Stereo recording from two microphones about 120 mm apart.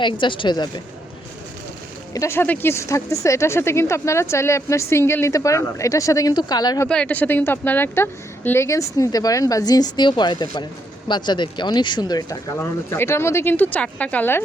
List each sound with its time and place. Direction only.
0.0 s speech: 40° left (ahead or behind)
2.1 s speech: 20° left (ahead or behind)
6.8 s speech: 10° left (ahead or behind); by 12.5 s 35° left (ahead or behind)
12.5 s speech: 20° left (ahead or behind)